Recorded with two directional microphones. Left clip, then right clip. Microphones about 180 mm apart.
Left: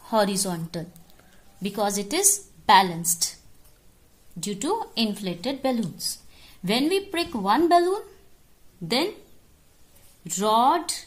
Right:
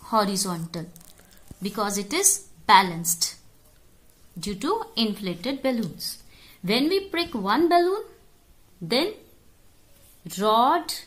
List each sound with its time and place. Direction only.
0.0 s a woman's voice: 15° left (ahead or behind)
4.4 s a woman's voice: 10° left (ahead or behind)
10.3 s speech: 5° left (ahead or behind)